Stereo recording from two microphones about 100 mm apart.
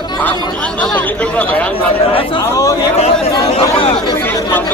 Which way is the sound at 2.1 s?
65° left (ahead or behind).